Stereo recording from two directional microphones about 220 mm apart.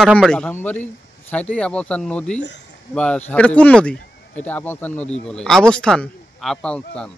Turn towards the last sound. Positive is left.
turn(degrees=5)  # may be behind; listen again after turning